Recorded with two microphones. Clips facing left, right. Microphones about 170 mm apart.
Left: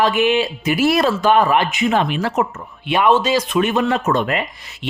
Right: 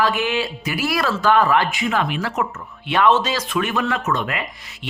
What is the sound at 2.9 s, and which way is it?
A man's voice, 15° left (ahead or behind).